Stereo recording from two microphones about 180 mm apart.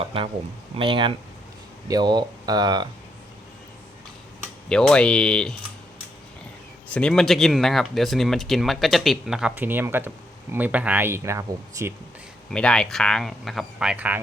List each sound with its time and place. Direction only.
0.0 s speech: 30° right (ahead or behind)
4.7 s speech: 5° left (ahead or behind)
6.9 s speech: 5° left (ahead or behind); by 11.9 s 15° right (ahead or behind)
12.5 s speech: 5° left (ahead or behind)